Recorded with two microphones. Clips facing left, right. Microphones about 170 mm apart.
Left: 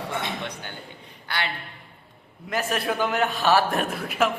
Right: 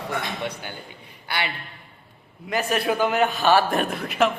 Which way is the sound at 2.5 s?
Centre (ahead or behind).